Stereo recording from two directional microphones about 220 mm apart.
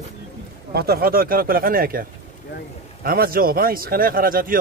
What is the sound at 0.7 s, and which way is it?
Speech, 45° right (ahead or behind).